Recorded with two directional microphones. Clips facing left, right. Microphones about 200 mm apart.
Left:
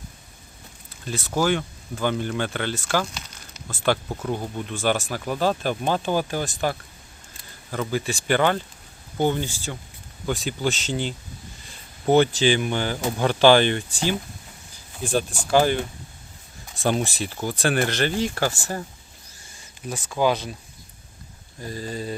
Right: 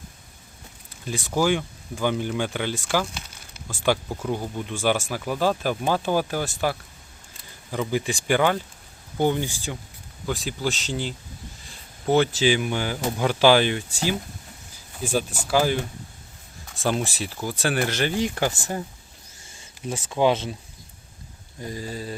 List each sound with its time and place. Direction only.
1.0 s speech: 15° right (ahead or behind)
10.2 s speech: centre (ahead or behind)
16.8 s speech: centre (ahead or behind); by 20.6 s 25° right (ahead or behind)
21.6 s speech: 15° right (ahead or behind)